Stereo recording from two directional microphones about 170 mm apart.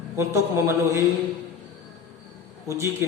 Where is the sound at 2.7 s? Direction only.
15° right (ahead or behind).